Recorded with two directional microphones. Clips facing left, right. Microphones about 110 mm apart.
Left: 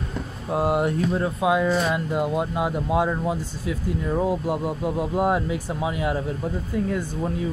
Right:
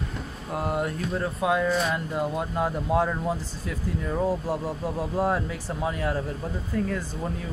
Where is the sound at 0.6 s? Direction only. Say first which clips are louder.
Left 6 dB; 25° left (ahead or behind).